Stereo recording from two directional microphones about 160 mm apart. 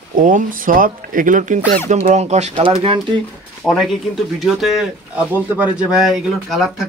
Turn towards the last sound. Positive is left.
turn(degrees=-5)  # may be behind; listen again after turning